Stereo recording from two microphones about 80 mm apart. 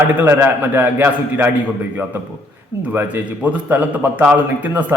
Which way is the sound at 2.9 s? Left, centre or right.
Right.